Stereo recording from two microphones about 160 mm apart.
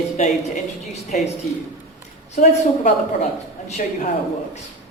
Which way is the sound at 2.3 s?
45° left (ahead or behind).